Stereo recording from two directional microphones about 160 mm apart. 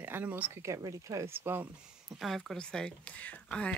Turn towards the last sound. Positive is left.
turn(degrees=5)  # may be behind; listen again after turning